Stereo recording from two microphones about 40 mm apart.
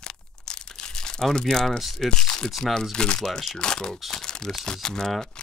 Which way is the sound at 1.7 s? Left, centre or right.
Centre.